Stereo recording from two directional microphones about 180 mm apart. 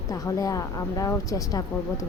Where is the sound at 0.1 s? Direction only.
20° left (ahead or behind).